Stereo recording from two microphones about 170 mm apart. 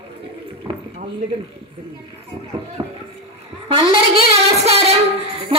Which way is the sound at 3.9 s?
35° right (ahead or behind).